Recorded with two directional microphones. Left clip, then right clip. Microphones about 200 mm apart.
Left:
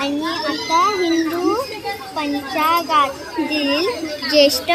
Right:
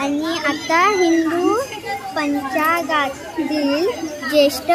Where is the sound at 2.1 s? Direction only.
10° right (ahead or behind).